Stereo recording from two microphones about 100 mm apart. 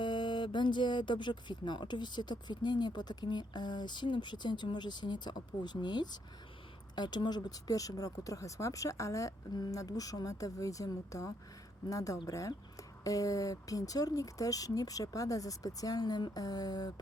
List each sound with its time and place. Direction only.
0.0 s speech: 50° left (ahead or behind)